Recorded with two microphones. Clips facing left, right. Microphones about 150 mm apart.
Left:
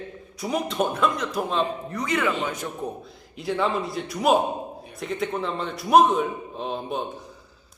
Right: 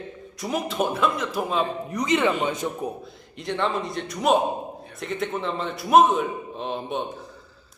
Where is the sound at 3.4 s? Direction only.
5° left (ahead or behind).